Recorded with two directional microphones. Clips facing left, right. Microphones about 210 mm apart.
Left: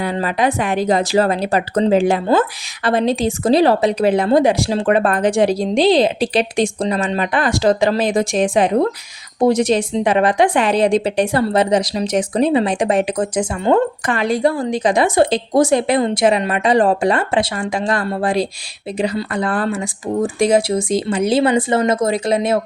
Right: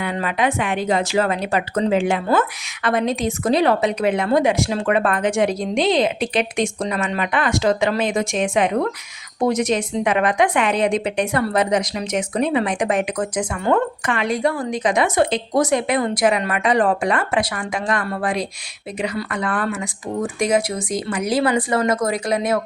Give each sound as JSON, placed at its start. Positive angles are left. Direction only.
{"t": 0.0, "sound": "a woman's voice", "side_deg": 35}